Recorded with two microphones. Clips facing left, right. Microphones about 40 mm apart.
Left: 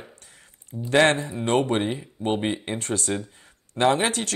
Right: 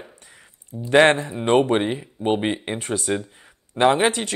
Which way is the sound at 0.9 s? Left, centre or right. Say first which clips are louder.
Right 4 dB; right.